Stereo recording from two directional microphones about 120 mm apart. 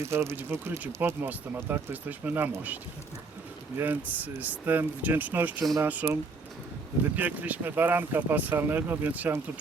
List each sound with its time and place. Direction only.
0.0 s speech: 20° right (ahead or behind)
3.8 s speech: 15° right (ahead or behind)
7.2 s speech: 15° right (ahead or behind)